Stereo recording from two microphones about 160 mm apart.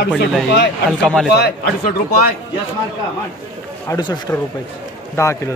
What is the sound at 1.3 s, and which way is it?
Speech, 90° left.